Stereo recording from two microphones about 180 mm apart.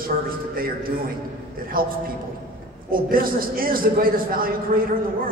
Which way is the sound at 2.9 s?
50° right (ahead or behind).